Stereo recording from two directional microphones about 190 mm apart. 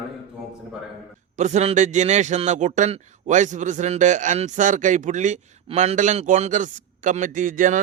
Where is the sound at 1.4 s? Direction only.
40° right (ahead or behind).